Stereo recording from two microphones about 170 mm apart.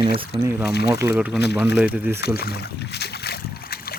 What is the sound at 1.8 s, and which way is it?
Speech, 5° right (ahead or behind).